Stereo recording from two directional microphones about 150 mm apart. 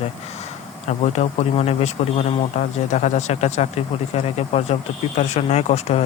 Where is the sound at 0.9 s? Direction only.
45° left (ahead or behind).